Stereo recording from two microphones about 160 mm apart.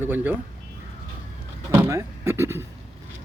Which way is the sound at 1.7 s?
15° right (ahead or behind).